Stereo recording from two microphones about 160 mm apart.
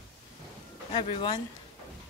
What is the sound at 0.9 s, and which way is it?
Speech, 30° left (ahead or behind).